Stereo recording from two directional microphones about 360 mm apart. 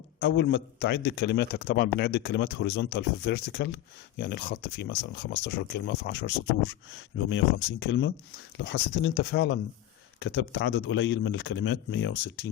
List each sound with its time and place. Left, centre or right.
0.2 s a man's voice: left